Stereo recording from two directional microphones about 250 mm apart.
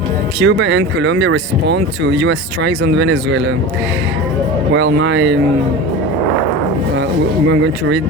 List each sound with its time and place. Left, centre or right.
0.3 s speech: right
4.7 s speech: right
7.4 s speech: right